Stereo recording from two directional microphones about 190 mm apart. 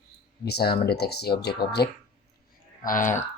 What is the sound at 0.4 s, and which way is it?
Speech, 55° left (ahead or behind).